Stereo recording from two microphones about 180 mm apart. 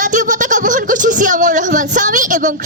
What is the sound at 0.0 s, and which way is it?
Speech, 45° right (ahead or behind).